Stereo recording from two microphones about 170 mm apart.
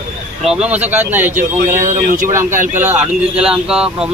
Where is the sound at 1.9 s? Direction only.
55° right (ahead or behind).